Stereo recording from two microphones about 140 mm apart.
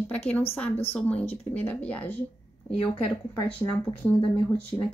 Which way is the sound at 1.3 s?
45° left (ahead or behind).